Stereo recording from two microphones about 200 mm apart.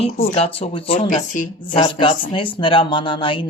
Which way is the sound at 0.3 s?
30° left (ahead or behind).